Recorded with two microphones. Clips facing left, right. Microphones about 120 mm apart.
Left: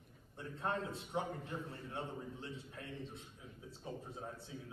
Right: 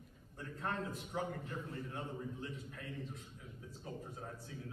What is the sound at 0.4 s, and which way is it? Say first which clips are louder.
A man's voice: left 1 dB; 25° left (ahead or behind).